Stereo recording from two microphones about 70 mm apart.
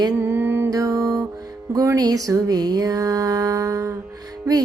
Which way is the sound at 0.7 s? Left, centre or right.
Right.